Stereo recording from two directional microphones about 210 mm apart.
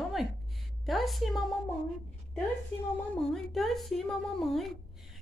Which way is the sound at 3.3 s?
Centre (ahead or behind).